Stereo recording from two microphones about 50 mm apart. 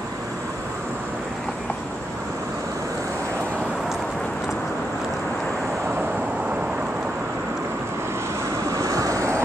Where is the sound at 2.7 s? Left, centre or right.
Right.